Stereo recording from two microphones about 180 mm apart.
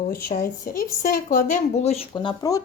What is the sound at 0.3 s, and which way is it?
A woman's voice, 55° left (ahead or behind).